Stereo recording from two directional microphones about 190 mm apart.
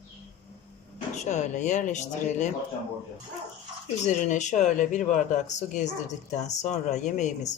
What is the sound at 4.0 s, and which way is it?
Speech, 40° left (ahead or behind).